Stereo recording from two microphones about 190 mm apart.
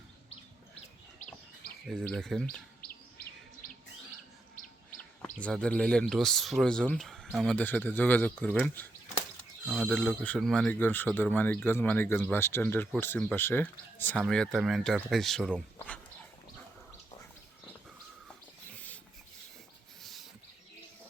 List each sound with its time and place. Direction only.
1.9 s speech: 5° left (ahead or behind)
2.8 s chirp: 50° left (ahead or behind)
5.2 s speech: 5° left (ahead or behind)
20.0 s a sound: centre (ahead or behind)